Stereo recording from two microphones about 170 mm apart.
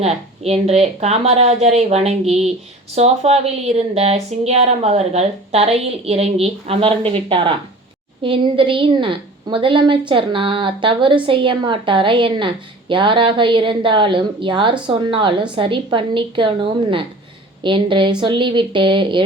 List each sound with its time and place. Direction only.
0.0 s a woman's voice: 40° right (ahead or behind)
17.6 s a woman's voice: 30° right (ahead or behind)